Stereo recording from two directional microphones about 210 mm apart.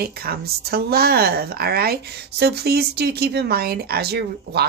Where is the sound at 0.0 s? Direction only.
50° right (ahead or behind).